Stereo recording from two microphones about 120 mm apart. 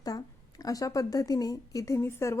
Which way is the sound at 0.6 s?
30° left (ahead or behind).